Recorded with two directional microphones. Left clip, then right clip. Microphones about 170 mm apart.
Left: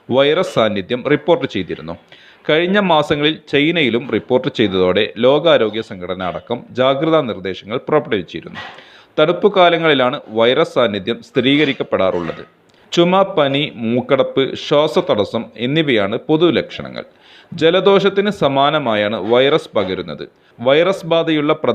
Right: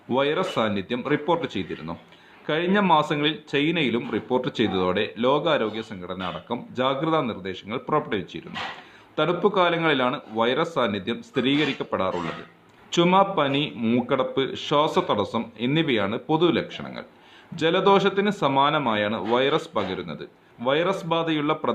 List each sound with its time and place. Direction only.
0.1 s a man's voice: 30° left (ahead or behind)